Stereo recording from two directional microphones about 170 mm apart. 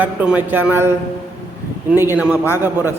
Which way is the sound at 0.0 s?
10° right (ahead or behind).